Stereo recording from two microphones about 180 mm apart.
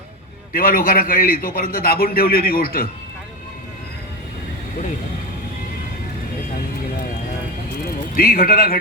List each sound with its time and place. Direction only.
0.5 s a man's voice: 50° left (ahead or behind)
8.1 s a man's voice: 50° left (ahead or behind)